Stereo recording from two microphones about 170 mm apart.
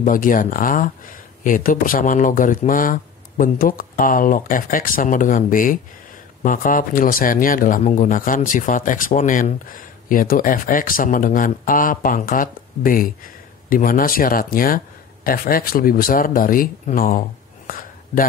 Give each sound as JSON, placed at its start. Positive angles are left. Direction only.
{"t": 0.0, "sound": "speech", "side_deg": 50}